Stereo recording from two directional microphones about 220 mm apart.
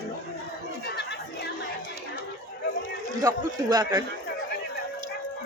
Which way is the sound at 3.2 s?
15° right (ahead or behind).